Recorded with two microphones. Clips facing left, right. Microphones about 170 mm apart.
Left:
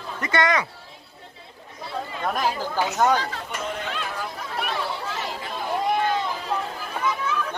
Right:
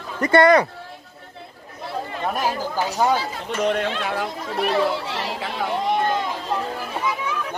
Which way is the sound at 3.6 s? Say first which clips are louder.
Right 10 dB; 75° right (ahead or behind).